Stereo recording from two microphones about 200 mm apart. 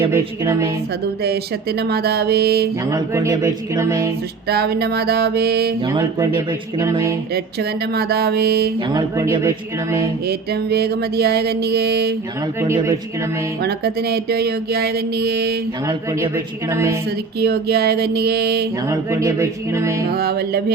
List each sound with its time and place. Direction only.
0.1 s speech: 10° right (ahead or behind)
1.8 s music: 55° right (ahead or behind)
2.9 s speech: 15° right (ahead or behind)
4.4 s music: 50° right (ahead or behind)
5.8 s speech: 20° right (ahead or behind)
7.3 s music: 50° right (ahead or behind)
8.9 s speech: 15° right (ahead or behind)
10.2 s music: 50° right (ahead or behind)
12.6 s speech: 15° right (ahead or behind)
13.6 s music: 55° right (ahead or behind)
16.3 s speech: 15° right (ahead or behind)
17.4 s music: 50° right (ahead or behind)
18.9 s speech: 15° right (ahead or behind)
20.1 s music: 50° right (ahead or behind)